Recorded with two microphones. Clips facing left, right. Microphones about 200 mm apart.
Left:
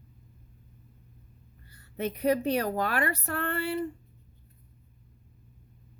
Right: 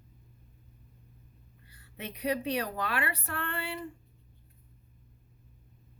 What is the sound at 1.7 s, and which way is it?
Speech, 45° left (ahead or behind).